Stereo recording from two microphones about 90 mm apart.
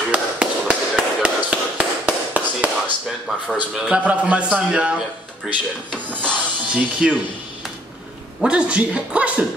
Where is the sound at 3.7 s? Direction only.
15° right (ahead or behind).